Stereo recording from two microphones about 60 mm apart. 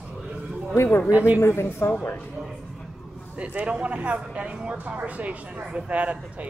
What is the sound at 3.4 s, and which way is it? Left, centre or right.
A man's voice, centre.